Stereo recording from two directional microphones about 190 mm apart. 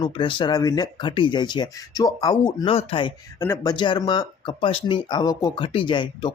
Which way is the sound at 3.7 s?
25° left (ahead or behind).